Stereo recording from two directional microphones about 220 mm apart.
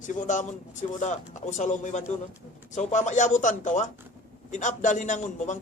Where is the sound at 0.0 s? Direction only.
35° left (ahead or behind).